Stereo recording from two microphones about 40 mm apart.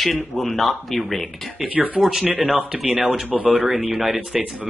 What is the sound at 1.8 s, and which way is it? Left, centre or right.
Speech, centre.